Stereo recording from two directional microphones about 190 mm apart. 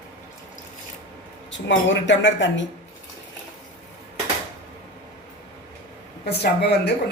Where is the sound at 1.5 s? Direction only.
75° left (ahead or behind).